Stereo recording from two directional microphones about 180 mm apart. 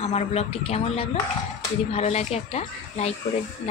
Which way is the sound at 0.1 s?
35° left (ahead or behind).